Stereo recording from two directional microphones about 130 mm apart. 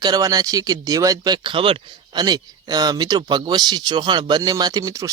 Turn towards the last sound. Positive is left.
turn(degrees=-25)  # may be behind; listen again after turning